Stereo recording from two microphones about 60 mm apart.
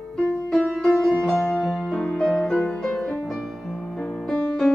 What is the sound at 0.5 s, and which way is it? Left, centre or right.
Music, centre.